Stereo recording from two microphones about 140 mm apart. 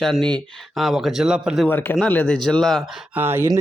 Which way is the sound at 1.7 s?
15° left (ahead or behind).